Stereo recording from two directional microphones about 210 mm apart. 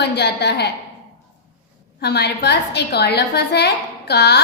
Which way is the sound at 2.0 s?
50° left (ahead or behind).